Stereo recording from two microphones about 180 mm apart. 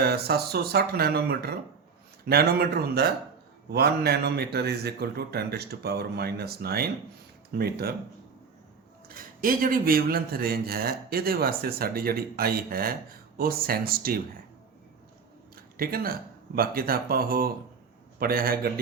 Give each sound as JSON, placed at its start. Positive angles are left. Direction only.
{"t": 0.0, "sound": "speech", "side_deg": -60}
{"t": 9.0, "sound": "speech", "side_deg": -50}
{"t": 15.5, "sound": "a sound", "side_deg": -55}
{"t": 16.6, "sound": "speech", "side_deg": -55}